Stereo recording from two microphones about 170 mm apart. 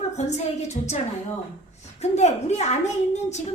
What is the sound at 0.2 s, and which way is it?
A woman's voice, 40° left (ahead or behind).